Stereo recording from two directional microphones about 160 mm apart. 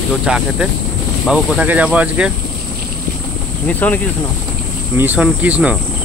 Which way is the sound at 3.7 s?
10° left (ahead or behind).